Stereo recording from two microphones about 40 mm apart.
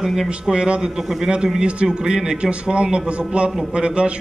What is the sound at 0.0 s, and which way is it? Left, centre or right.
Speech, centre.